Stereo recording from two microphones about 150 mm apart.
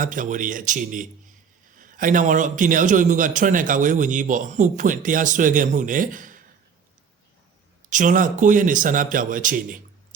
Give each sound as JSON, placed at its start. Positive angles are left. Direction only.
{"t": 0.0, "sound": "a man's voice", "side_deg": -60}
{"t": 7.9, "sound": "a man's voice", "side_deg": -60}